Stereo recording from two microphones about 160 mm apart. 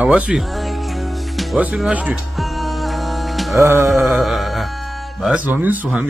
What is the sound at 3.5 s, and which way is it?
Music, 20° right (ahead or behind).